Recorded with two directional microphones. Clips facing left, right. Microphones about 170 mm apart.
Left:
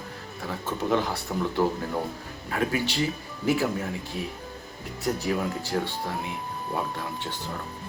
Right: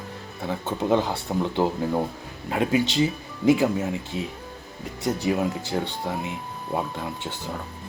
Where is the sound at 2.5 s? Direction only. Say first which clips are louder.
Right 4 dB; 20° right (ahead or behind).